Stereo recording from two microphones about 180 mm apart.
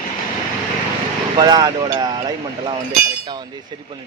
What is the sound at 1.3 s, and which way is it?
Speech, 20° right (ahead or behind).